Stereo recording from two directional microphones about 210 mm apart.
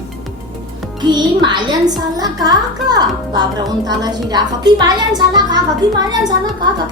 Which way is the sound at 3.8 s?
20° right (ahead or behind).